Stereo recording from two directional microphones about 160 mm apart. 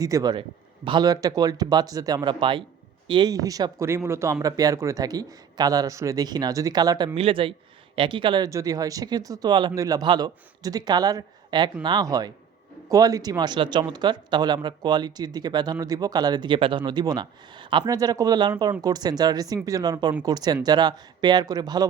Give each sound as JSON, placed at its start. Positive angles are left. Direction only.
{"t": 0.0, "sound": "speech", "side_deg": -25}